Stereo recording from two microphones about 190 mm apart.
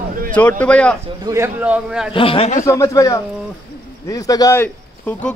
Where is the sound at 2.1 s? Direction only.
30° left (ahead or behind).